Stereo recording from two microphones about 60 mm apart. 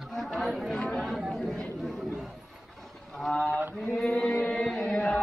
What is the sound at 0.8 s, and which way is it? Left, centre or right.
Mantra, centre.